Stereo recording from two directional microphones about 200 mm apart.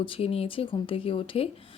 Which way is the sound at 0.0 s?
25° left (ahead or behind).